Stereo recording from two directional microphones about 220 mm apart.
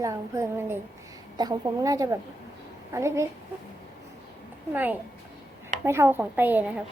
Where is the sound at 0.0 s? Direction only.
15° right (ahead or behind).